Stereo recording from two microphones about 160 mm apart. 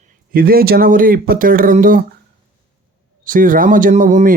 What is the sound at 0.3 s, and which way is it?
Speech, 65° right (ahead or behind).